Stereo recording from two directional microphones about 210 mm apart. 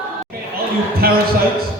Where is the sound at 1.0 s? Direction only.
45° right (ahead or behind).